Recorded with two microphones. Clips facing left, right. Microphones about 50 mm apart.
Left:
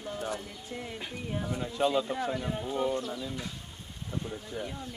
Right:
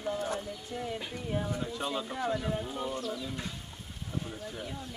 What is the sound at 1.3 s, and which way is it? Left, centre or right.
Speech, centre.